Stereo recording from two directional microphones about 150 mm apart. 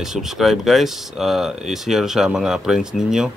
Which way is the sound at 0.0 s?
5° right (ahead or behind).